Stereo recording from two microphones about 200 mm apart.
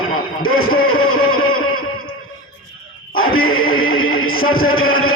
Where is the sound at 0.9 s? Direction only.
90° left.